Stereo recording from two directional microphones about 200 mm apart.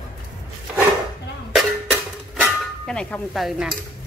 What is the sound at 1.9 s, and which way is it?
Dishes, centre (ahead or behind).